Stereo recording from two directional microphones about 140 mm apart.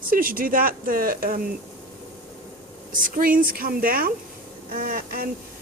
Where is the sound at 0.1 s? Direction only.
90° right.